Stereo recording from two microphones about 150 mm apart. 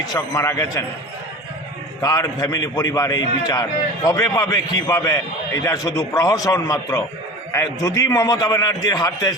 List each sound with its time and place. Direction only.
0.0 s a man's voice: 25° left (ahead or behind)
2.0 s a man's voice: 25° left (ahead or behind)